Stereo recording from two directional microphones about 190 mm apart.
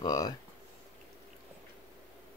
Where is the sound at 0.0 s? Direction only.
20° left (ahead or behind).